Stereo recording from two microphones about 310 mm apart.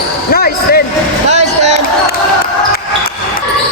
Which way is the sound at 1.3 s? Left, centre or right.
Right.